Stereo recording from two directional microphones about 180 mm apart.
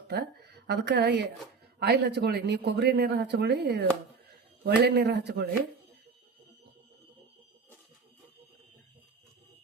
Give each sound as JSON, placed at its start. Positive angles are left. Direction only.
{"t": 0.1, "sound": "speech", "side_deg": -65}